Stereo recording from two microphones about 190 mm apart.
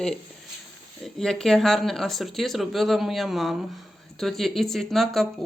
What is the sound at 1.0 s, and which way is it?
Speech, centre (ahead or behind).